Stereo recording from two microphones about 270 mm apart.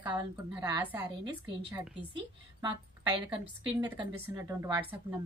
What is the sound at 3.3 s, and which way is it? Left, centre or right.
A woman's voice, centre.